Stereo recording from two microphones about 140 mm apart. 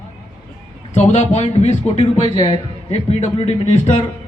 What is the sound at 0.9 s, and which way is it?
A man's voice, 55° left (ahead or behind).